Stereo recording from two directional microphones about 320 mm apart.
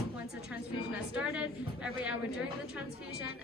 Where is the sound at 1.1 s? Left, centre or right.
Centre.